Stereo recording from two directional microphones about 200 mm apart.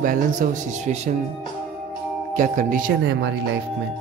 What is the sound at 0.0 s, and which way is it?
Speech, 40° right (ahead or behind).